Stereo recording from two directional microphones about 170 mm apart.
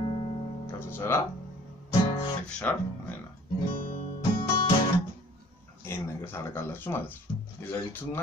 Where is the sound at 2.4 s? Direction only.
10° left (ahead or behind).